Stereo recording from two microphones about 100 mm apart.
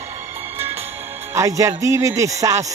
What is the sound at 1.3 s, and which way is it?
Speech, 30° right (ahead or behind).